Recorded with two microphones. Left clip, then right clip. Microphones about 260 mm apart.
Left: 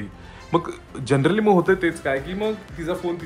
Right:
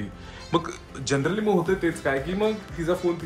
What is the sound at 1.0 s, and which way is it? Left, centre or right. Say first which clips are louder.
Speech: left 4 dB; left.